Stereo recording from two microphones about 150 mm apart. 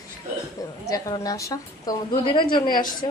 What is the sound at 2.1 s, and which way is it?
Speech, 35° left (ahead or behind).